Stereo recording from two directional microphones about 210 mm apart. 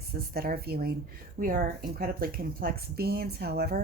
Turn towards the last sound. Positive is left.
turn(degrees=-45)  # may be behind; listen again after turning